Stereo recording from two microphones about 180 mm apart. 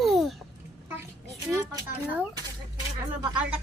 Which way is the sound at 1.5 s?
15° right (ahead or behind).